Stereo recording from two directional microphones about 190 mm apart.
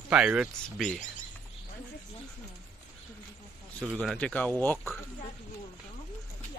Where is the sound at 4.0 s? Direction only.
5° left (ahead or behind).